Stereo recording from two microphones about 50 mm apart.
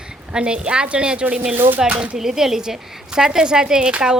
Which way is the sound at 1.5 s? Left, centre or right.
Right.